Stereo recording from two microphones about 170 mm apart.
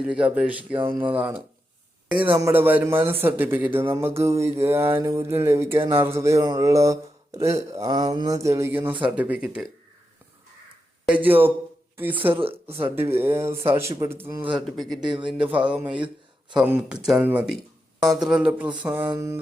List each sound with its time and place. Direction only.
0.0 s speech: 5° right (ahead or behind)
11.0 s speech: 10° right (ahead or behind)
12.3 s speech: 30° right (ahead or behind)
13.0 s speech: 15° right (ahead or behind)
15.0 s speech: 25° right (ahead or behind)
15.3 s speech: 5° right (ahead or behind)
18.0 s speech: 20° right (ahead or behind)
18.3 s speech: 5° right (ahead or behind)